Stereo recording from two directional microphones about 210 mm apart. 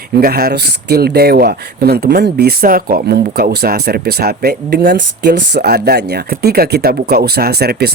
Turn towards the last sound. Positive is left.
turn(degrees=-50)  # may be behind; listen again after turning